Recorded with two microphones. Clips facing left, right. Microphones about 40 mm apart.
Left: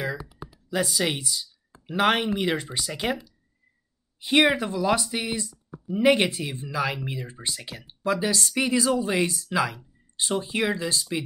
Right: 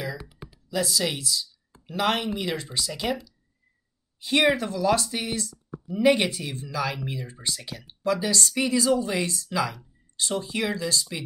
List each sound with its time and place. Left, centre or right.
0.7 s speech: left
4.2 s speech: left